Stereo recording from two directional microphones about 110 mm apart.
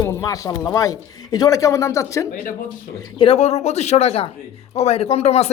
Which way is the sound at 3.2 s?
65° left (ahead or behind).